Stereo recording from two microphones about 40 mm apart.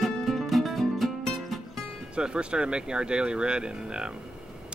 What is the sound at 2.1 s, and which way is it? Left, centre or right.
Speech, right.